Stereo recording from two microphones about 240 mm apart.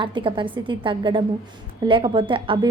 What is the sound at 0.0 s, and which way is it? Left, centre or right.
A woman's voice, centre.